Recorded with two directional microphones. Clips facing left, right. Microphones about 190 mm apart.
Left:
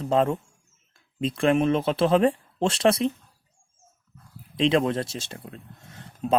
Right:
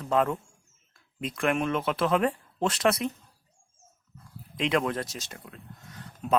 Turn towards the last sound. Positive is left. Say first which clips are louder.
# left 3 dB
turn(degrees=25)  # may be behind; listen again after turning